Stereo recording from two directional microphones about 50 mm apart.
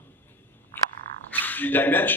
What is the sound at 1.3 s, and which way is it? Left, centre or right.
Speech, left.